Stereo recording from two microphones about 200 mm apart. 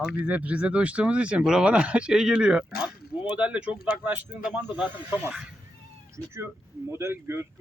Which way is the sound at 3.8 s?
45° left (ahead or behind).